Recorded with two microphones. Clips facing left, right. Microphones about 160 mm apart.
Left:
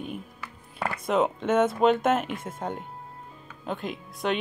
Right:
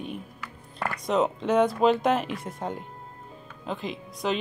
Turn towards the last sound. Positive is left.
turn(degrees=0)  # may be behind; listen again after turning